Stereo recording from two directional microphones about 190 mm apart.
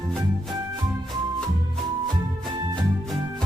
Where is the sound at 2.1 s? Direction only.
25° right (ahead or behind).